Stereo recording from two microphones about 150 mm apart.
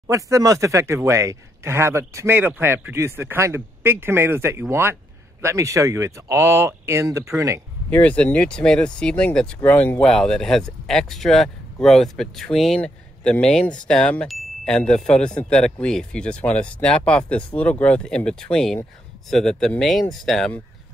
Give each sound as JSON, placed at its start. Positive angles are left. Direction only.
{"t": 0.0, "sound": "speech", "side_deg": -20}
{"t": 7.9, "sound": "speech", "side_deg": 10}